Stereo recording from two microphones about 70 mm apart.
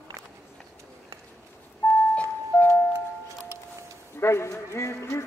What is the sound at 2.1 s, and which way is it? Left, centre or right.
Doorbell, left.